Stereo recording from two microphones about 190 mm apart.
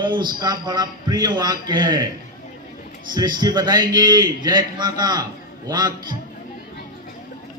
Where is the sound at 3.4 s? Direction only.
20° right (ahead or behind).